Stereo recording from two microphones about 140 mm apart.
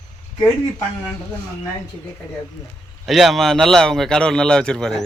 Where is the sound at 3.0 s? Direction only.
Centre (ahead or behind).